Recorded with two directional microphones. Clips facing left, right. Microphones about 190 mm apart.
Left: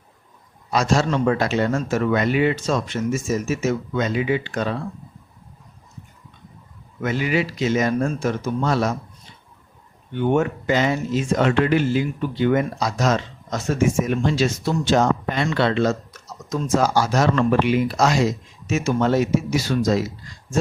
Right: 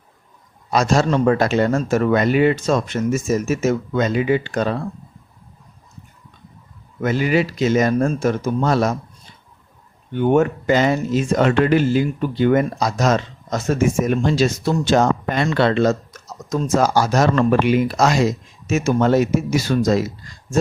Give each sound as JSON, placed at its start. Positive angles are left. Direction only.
{"t": 0.7, "sound": "speech", "side_deg": -45}
{"t": 7.0, "sound": "speech", "side_deg": -40}
{"t": 10.2, "sound": "speech", "side_deg": -45}